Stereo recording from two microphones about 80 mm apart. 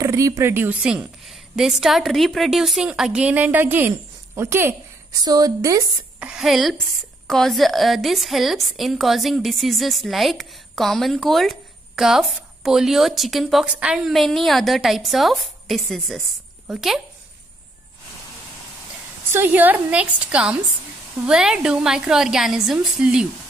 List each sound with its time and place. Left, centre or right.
0.0 s a sound: right
0.4 s speech: right
0.7 s a woman's voice: centre; by 4.7 s right
5.2 s a woman's voice: right
6.1 s a sound: centre
6.4 s a woman's voice: centre
19.3 s a woman's voice: right